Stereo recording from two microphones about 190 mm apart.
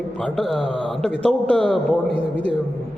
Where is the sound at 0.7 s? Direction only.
25° right (ahead or behind).